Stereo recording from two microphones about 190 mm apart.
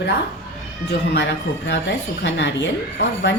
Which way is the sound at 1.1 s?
65° left (ahead or behind).